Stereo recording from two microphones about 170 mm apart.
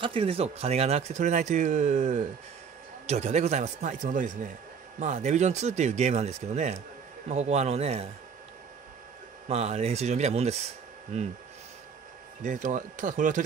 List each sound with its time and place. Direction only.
0.0 s speech: 35° right (ahead or behind)
9.5 s speech: 40° right (ahead or behind)
12.4 s speech: 45° right (ahead or behind)